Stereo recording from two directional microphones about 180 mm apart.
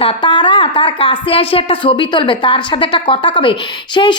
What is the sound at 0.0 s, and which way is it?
A woman's voice, 25° left (ahead or behind).